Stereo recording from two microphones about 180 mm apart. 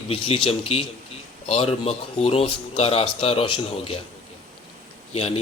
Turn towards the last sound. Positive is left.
turn(degrees=35)  # may be behind; listen again after turning